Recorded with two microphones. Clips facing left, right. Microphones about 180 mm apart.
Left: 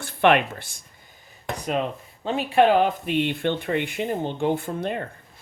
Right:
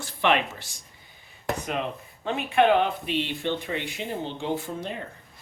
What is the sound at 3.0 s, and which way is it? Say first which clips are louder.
Speech: left 5 dB; 55° left (ahead or behind).